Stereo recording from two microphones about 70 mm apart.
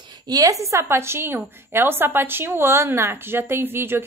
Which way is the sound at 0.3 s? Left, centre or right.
Right.